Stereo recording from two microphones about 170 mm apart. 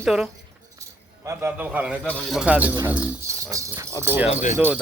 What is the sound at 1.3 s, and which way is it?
A man's voice, 10° right (ahead or behind).